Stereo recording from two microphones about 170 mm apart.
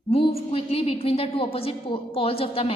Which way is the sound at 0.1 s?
35° left (ahead or behind).